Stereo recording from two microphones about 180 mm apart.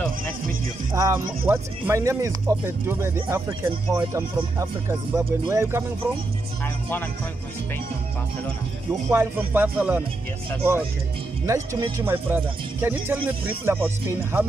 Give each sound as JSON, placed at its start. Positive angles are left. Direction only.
{"t": 0.9, "sound": "music", "side_deg": -20}
{"t": 1.5, "sound": "speech", "side_deg": -15}
{"t": 6.6, "sound": "speech", "side_deg": 10}
{"t": 9.1, "sound": "speech", "side_deg": -10}